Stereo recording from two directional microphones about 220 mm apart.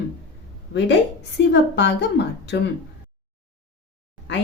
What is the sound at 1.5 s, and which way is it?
A woman's voice, 50° left (ahead or behind).